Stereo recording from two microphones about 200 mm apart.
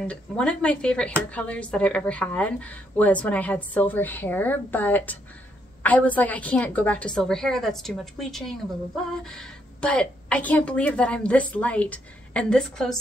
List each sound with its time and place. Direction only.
0.0 s a woman's voice: 5° left (ahead or behind)